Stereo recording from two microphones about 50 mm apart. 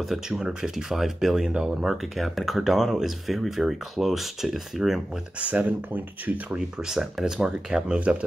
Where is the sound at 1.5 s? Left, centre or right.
Right.